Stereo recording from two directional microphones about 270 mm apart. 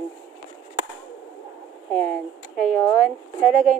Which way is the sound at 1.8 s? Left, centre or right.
Centre.